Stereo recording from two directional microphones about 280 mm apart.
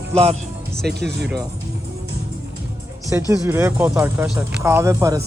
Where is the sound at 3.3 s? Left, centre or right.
Centre.